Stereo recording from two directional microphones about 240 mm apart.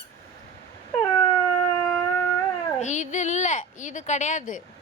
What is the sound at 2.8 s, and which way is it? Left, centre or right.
Speech, left.